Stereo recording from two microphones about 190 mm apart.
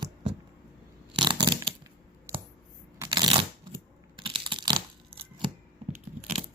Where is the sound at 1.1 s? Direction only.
25° right (ahead or behind).